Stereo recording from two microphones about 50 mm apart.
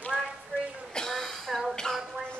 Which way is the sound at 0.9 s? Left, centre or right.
Centre.